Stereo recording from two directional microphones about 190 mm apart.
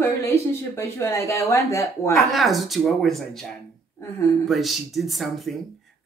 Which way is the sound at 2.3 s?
Centre (ahead or behind).